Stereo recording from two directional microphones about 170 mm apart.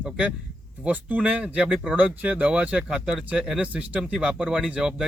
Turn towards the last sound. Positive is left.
turn(degrees=-5)  # may be behind; listen again after turning